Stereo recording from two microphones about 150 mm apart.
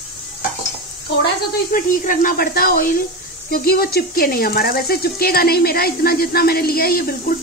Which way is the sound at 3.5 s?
85° left.